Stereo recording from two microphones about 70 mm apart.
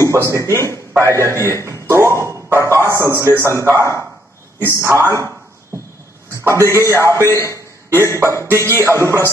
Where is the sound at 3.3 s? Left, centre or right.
Right.